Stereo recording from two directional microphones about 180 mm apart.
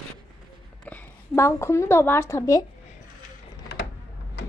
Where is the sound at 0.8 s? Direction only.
10° left (ahead or behind).